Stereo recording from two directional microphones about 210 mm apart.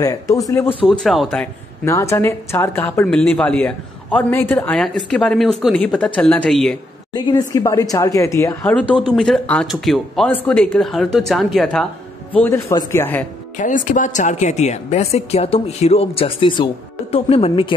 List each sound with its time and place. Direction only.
0.0 s speech: 15° left (ahead or behind)
0.8 s a woman's voice: centre (ahead or behind)
1.9 s a woman's voice: 15° left (ahead or behind)
7.2 s a woman's voice: 20° left (ahead or behind)
13.6 s speech: 40° left (ahead or behind)